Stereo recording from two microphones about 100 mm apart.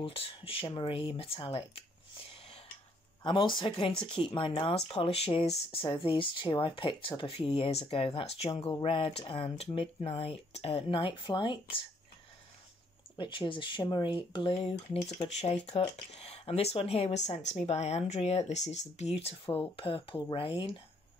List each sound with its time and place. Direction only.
0.0 s speech: 65° left (ahead or behind)
3.3 s speech: 55° left (ahead or behind)
13.2 s speech: 50° left (ahead or behind)
15.2 s speech: 90° left
19.6 s speech: 60° left (ahead or behind)